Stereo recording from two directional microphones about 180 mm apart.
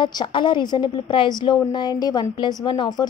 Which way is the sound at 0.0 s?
25° left (ahead or behind).